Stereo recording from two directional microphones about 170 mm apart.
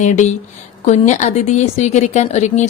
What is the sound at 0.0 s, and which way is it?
Speech, 45° left (ahead or behind).